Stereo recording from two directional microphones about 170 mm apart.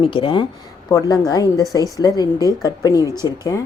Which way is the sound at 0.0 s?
30° left (ahead or behind).